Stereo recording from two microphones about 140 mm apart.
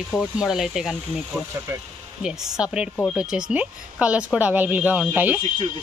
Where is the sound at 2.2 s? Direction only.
5° right (ahead or behind).